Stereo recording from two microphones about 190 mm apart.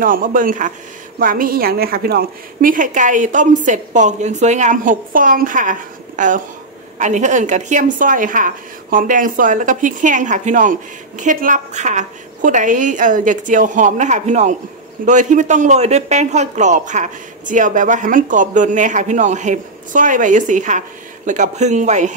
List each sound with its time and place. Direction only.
0.0 s a woman's voice: 45° right (ahead or behind)